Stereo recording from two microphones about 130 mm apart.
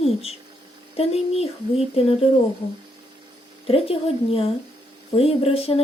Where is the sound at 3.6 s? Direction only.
50° left (ahead or behind).